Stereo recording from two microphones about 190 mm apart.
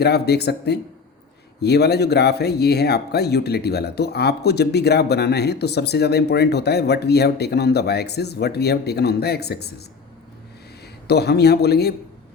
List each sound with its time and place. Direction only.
0.0 s speech: 60° left (ahead or behind)
11.1 s speech: 60° left (ahead or behind)